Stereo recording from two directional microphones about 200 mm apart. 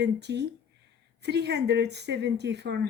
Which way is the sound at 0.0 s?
60° right (ahead or behind).